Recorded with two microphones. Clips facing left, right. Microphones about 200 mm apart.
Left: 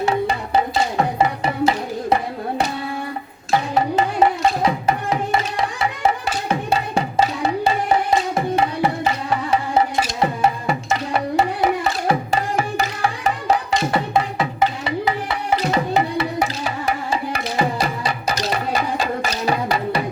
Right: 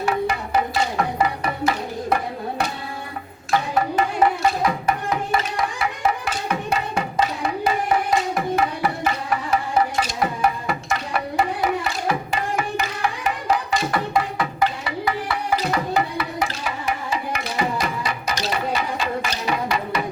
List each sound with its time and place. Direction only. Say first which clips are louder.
0.0 s tabla: left 2 dB; 25° left (ahead or behind)
3.8 s music: left 3 dB; 25° left (ahead or behind)
8.4 s tabla: left 2 dB; 25° left (ahead or behind)
9.3 s music: left 2 dB; 25° left (ahead or behind)